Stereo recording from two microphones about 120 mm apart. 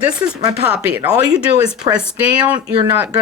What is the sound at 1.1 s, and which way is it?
Speech, 35° right (ahead or behind).